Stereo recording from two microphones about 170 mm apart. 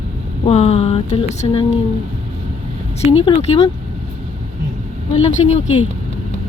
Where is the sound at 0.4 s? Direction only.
35° left (ahead or behind).